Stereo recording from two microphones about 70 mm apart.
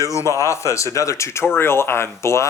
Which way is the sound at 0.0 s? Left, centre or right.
Left.